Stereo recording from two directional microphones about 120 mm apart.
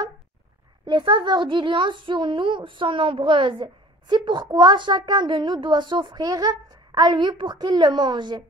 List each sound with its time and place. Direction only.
0.8 s a child's voice: 40° right (ahead or behind)